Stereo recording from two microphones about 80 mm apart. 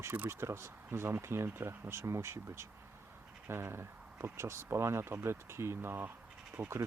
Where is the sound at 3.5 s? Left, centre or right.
Right.